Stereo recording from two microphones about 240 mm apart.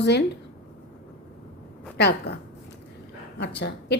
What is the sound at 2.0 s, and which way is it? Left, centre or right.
Speech, left.